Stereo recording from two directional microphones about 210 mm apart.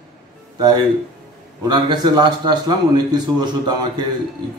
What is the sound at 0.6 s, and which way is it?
A man's voice, 20° right (ahead or behind).